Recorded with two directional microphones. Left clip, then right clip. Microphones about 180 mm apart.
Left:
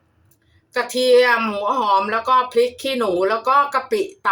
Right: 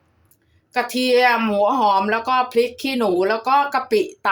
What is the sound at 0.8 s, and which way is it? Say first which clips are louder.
Speech: left 2 dB; 40° right (ahead or behind).